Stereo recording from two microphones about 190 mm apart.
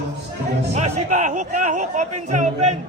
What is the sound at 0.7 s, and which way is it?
Speech, 35° right (ahead or behind).